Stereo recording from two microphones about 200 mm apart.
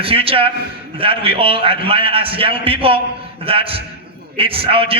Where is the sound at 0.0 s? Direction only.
30° right (ahead or behind).